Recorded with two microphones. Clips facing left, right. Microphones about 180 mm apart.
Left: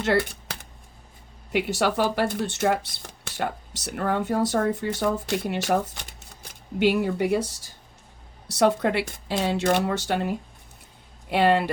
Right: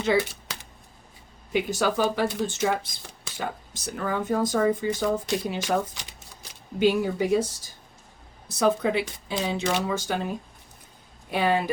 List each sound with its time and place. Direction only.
0.0 s speech: 70° left (ahead or behind)
1.5 s speech: 75° left (ahead or behind)